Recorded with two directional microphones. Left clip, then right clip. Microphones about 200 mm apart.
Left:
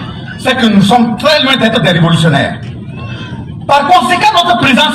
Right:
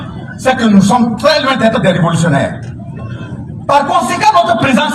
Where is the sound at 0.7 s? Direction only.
60° right (ahead or behind).